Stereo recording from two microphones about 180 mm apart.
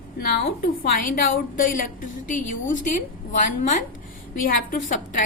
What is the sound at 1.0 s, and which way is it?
A woman's voice, 50° left (ahead or behind).